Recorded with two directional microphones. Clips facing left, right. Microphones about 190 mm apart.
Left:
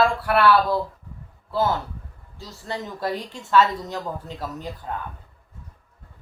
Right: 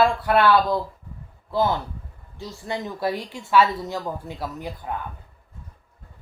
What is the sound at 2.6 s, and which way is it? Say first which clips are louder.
Speech: right 2 dB; 10° right (ahead or behind).